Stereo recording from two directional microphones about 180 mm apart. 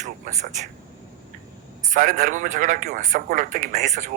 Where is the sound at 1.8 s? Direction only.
45° right (ahead or behind).